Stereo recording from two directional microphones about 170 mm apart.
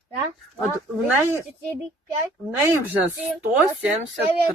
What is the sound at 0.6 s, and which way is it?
Speech, 10° right (ahead or behind).